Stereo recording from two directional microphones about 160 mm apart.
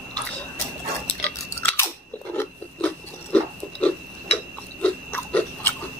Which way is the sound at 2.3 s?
15° left (ahead or behind).